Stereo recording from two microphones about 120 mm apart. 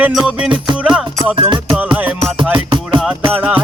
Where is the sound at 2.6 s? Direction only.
40° right (ahead or behind).